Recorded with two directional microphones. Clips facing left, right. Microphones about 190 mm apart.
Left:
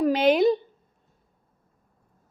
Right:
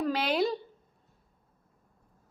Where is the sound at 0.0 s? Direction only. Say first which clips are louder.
Left 9 dB; 20° left (ahead or behind).